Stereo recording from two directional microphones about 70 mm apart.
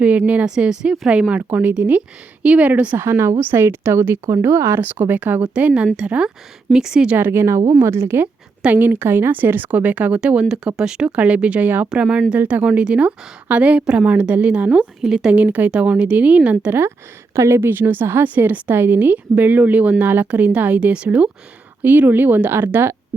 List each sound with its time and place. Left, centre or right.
0.0 s a woman's voice: right
0.4 s a woman's voice: centre
1.5 s a woman's voice: right
3.0 s speech: right
4.8 s a woman's voice: right; by 7.2 s centre
7.2 s a woman's voice: right; by 12.2 s centre
12.3 s a woman's voice: right; by 15.4 s centre
15.4 s a woman's voice: right
17.3 s a woman's voice: right; by 21.2 s centre
21.8 s a woman's voice: right